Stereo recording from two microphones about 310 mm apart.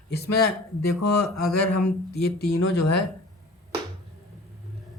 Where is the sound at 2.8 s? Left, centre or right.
Left.